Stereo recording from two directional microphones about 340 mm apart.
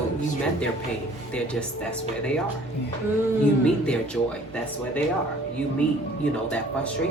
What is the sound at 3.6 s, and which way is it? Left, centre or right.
Speech, centre.